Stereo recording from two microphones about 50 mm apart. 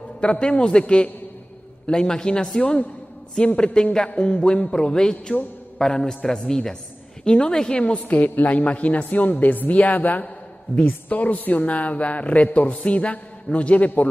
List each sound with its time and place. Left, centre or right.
0.2 s a man's voice: left
7.8 s a woman's voice: left